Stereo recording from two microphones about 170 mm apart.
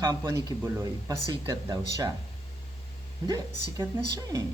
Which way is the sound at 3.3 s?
20° right (ahead or behind).